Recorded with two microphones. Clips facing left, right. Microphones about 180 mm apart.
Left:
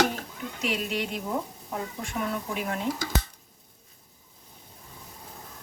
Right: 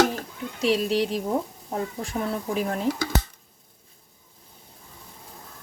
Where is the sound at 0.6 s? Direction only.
35° right (ahead or behind).